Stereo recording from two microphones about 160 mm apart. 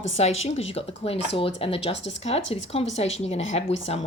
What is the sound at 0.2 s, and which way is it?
Speech, 40° left (ahead or behind).